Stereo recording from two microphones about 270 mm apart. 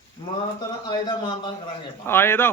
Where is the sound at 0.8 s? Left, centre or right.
Centre.